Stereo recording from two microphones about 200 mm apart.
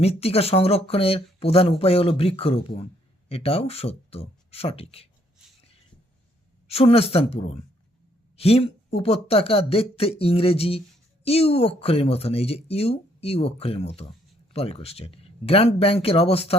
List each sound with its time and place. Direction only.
0.0 s speech: 30° left (ahead or behind)
6.7 s speech: 30° left (ahead or behind)